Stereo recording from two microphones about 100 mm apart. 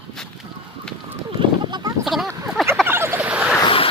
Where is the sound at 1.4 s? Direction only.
50° right (ahead or behind).